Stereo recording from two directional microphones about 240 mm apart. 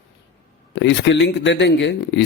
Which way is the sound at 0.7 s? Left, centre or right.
Left.